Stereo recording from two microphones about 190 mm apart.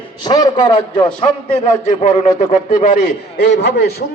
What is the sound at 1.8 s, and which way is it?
Speech, 35° left (ahead or behind).